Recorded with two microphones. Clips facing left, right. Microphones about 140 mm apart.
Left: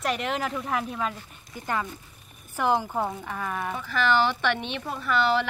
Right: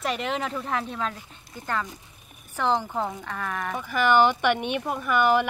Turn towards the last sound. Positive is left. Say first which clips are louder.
# right 2 dB
turn(degrees=-15)  # may be behind; listen again after turning